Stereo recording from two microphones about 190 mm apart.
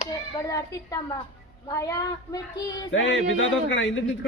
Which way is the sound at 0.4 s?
20° left (ahead or behind).